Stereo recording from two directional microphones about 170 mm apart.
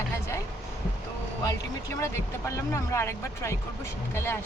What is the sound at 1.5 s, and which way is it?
Speech, 15° left (ahead or behind).